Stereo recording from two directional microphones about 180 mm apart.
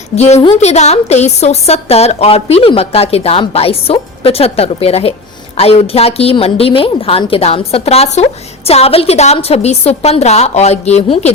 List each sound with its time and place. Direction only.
0.2 s a woman's voice: 40° left (ahead or behind)